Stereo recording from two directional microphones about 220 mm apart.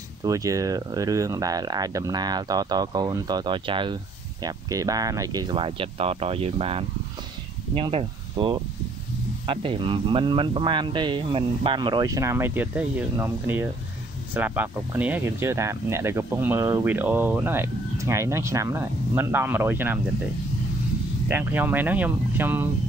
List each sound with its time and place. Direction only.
0.2 s a man's voice: 15° right (ahead or behind)
21.3 s speech: 10° right (ahead or behind)